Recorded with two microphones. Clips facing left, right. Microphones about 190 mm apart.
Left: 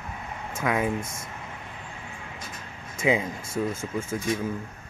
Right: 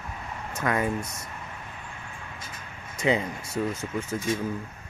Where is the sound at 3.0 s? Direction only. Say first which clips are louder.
Left 1 dB; 5° left (ahead or behind).